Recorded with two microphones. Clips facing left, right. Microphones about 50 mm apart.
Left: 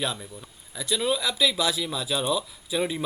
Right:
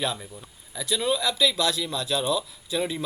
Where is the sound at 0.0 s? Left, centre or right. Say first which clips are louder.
Right 1 dB; centre.